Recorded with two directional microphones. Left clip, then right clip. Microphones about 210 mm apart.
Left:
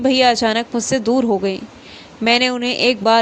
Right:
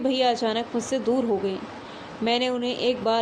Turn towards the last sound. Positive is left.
turn(degrees=40)  # may be behind; listen again after turning